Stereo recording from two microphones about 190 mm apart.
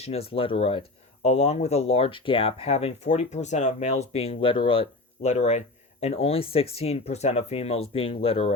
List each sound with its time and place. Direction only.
0.0 s speech: 30° left (ahead or behind)